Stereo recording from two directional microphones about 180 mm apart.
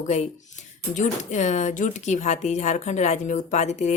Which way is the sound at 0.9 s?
40° left (ahead or behind).